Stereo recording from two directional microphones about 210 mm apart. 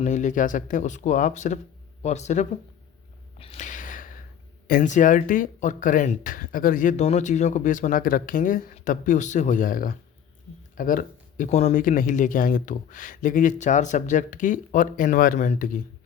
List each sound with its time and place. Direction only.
0.0 s speech: 35° left (ahead or behind)
3.3 s a sound: 30° left (ahead or behind)
4.7 s speech: 35° left (ahead or behind)